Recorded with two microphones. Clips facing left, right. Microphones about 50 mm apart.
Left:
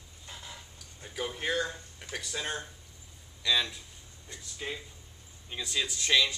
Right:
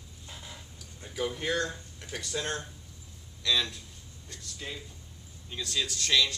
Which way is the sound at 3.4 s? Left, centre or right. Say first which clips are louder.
Even; centre.